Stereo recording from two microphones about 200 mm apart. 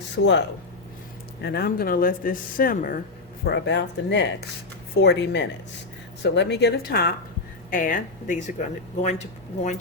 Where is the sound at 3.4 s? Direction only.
60° left (ahead or behind).